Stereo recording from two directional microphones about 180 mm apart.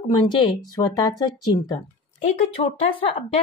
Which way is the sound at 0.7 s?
20° left (ahead or behind).